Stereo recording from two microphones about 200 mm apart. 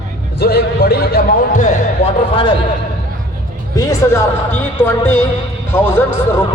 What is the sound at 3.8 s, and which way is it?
Speech, 15° left (ahead or behind).